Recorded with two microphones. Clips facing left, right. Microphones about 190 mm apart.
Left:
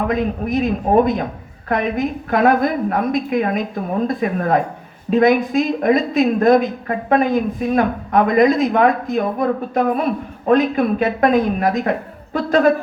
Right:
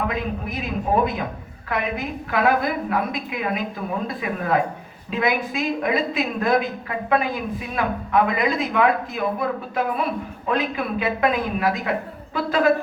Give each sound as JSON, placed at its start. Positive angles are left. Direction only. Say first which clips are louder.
{"t": 0.1, "sound": "a woman's voice", "louder": "left 8 dB", "side_deg": 45}